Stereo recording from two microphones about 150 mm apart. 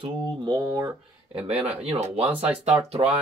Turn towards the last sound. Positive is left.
turn(degrees=-45)  # may be behind; listen again after turning